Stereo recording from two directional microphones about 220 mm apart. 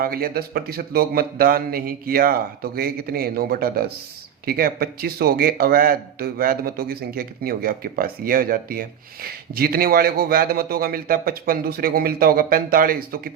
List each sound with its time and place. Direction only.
0.0 s a man's voice: 40° right (ahead or behind)